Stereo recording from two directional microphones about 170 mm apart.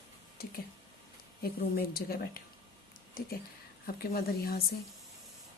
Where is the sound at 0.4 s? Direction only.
60° left (ahead or behind).